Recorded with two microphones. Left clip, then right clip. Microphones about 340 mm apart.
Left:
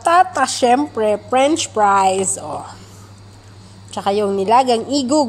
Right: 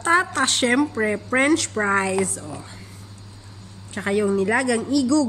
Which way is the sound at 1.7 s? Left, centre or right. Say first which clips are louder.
Left 8 dB; left.